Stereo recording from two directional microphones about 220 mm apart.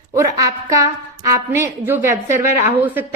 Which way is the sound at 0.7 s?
15° right (ahead or behind).